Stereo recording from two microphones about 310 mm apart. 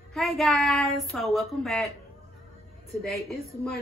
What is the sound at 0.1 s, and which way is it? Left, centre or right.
A woman's voice, centre.